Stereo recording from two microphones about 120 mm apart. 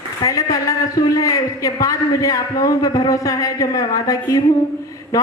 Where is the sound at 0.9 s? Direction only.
30° left (ahead or behind).